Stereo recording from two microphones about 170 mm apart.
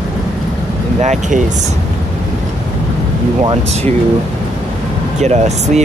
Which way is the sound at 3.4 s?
35° right (ahead or behind).